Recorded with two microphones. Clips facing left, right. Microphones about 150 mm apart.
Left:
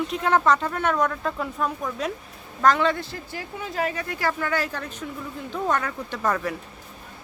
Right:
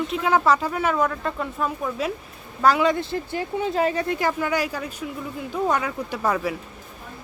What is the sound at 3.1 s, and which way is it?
Speech, 25° right (ahead or behind).